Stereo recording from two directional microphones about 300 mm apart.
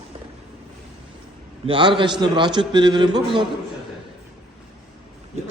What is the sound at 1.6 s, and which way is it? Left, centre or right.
A man's voice, centre.